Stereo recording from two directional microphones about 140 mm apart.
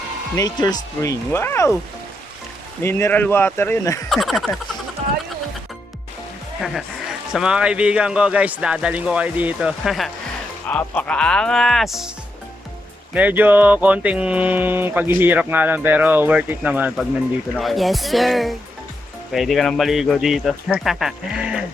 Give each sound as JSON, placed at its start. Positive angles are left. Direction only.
{"t": 0.3, "sound": "speech", "side_deg": 25}
{"t": 2.8, "sound": "speech", "side_deg": 15}
{"t": 4.1, "sound": "speech", "side_deg": 0}
{"t": 7.3, "sound": "a sound", "side_deg": -5}
{"t": 10.7, "sound": "speech", "side_deg": 10}
{"t": 13.1, "sound": "a sound", "side_deg": -10}
{"t": 17.6, "sound": "speech", "side_deg": 0}